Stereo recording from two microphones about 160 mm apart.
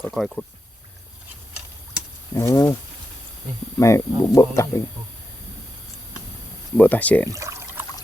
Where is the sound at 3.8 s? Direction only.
20° left (ahead or behind).